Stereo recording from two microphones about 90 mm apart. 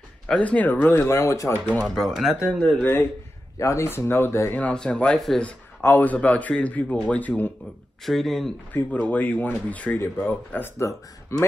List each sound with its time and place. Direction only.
0.3 s speech: 15° left (ahead or behind); by 1.5 s 35° left (ahead or behind)
1.7 s speech: 15° left (ahead or behind)
2.0 s speech: 5° right (ahead or behind)
2.8 s speech: 25° left (ahead or behind)
4.6 s speech: 10° left (ahead or behind)
5.8 s speech: 25° left (ahead or behind)
8.0 s speech: centre (ahead or behind)
8.7 s speech: 20° left (ahead or behind)